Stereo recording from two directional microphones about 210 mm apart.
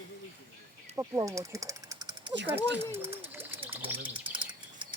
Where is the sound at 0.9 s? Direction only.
15° right (ahead or behind).